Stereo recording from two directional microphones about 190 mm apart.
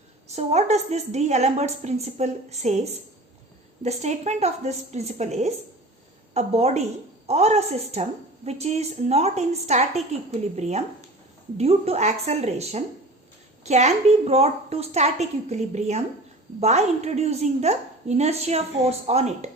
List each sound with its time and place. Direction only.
0.3 s a woman's voice: 35° right (ahead or behind)